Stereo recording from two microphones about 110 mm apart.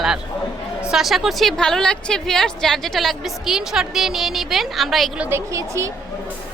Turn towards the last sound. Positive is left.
turn(degrees=-30)  # may be behind; listen again after turning